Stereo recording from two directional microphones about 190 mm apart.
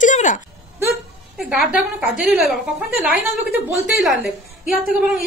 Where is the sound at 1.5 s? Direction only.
Centre (ahead or behind).